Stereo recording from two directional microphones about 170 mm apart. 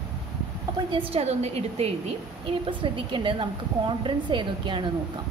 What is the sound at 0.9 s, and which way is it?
A woman's voice, 35° right (ahead or behind).